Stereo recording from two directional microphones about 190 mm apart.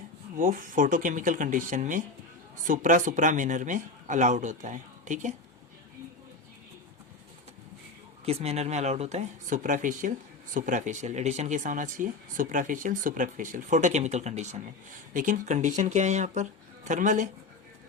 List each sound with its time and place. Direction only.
0.3 s speech: 45° right (ahead or behind)
8.2 s speech: 30° right (ahead or behind)